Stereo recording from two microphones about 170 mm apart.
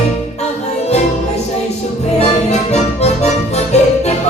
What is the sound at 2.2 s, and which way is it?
Music, 40° left (ahead or behind).